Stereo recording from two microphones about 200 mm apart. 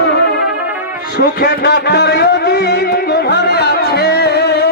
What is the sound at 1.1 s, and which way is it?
Speech, 50° left (ahead or behind).